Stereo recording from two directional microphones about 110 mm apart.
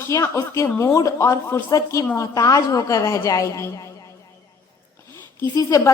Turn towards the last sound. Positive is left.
turn(degrees=30)  # may be behind; listen again after turning